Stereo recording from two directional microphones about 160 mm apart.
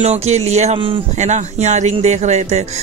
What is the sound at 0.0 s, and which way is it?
Speech, 45° right (ahead or behind).